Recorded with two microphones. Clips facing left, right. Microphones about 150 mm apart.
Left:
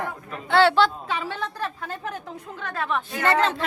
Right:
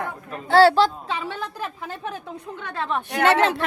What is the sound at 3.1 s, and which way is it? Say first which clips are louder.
Speech: right 4 dB; 75° right (ahead or behind).